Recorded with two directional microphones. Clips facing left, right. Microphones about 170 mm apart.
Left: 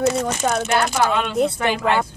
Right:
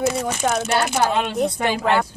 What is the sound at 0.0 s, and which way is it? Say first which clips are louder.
Speech: left 2 dB; centre (ahead or behind).